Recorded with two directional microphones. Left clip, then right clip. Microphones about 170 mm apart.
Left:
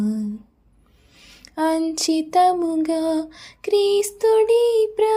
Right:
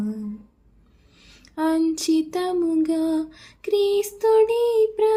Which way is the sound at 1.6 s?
40° left (ahead or behind).